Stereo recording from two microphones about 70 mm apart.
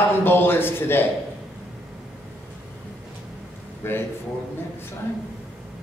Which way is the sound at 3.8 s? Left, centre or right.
Left.